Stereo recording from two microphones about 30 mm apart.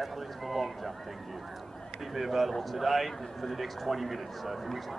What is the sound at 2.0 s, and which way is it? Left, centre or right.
A man's voice, centre.